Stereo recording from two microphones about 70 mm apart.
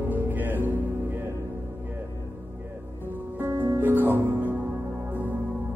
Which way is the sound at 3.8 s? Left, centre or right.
Right.